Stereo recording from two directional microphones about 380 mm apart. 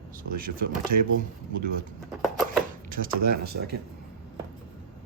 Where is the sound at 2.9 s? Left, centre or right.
Right.